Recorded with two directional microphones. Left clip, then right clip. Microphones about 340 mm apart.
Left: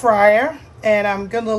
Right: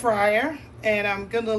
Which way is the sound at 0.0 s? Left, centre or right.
Left.